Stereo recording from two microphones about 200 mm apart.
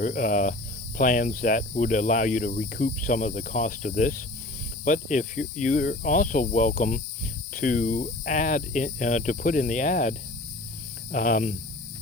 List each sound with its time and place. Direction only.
0.0 s speech: 40° left (ahead or behind)